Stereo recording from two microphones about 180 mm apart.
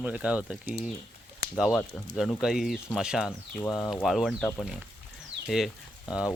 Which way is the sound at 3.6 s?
15° left (ahead or behind).